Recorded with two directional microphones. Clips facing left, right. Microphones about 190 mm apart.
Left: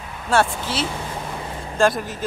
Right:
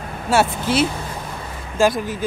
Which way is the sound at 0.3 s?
10° right (ahead or behind).